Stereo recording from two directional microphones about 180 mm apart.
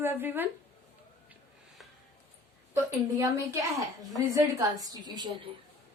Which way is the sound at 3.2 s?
15° right (ahead or behind).